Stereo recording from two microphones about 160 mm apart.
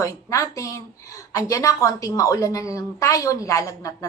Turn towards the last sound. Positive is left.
turn(degrees=20)  # may be behind; listen again after turning